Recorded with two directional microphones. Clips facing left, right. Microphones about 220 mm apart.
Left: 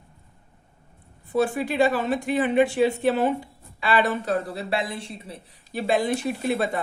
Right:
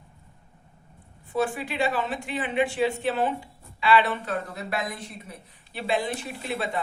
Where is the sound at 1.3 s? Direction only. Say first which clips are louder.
Left 4 dB; 40° left (ahead or behind).